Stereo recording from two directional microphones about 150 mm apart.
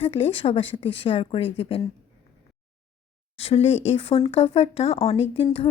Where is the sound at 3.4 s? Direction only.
45° left (ahead or behind).